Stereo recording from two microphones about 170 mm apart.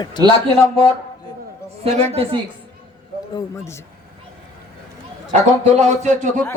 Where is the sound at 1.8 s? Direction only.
35° right (ahead or behind).